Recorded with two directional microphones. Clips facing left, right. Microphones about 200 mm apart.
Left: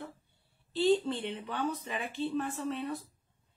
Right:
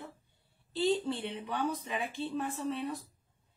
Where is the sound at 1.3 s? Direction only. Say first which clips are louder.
Even; 15° right (ahead or behind).